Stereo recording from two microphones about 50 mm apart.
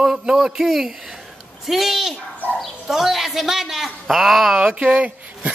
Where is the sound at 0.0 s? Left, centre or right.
Centre.